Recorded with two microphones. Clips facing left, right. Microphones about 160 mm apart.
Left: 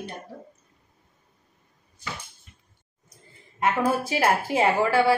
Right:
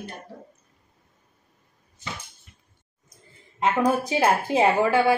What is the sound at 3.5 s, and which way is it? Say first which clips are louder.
A woman's voice: right 2 dB; 20° right (ahead or behind).